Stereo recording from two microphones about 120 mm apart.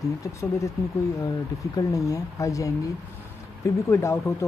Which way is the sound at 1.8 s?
30° left (ahead or behind).